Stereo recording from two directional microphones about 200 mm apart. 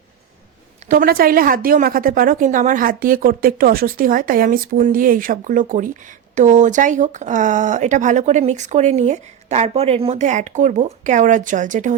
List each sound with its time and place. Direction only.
0.9 s a woman's voice: 45° right (ahead or behind)